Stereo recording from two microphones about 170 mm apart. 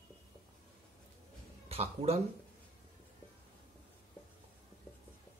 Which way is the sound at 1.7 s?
35° right (ahead or behind).